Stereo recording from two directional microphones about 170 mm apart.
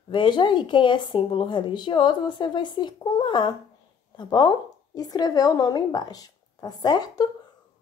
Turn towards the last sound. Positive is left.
turn(degrees=25)  # may be behind; listen again after turning